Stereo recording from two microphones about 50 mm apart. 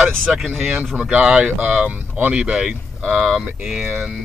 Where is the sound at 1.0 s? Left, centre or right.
Right.